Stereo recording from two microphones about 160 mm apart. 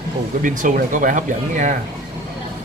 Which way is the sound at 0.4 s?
55° right (ahead or behind).